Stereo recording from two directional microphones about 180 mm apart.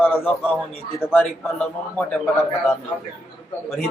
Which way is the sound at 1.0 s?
10° left (ahead or behind).